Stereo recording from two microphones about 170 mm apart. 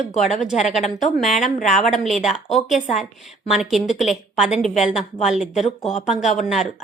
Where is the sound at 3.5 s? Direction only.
Centre (ahead or behind).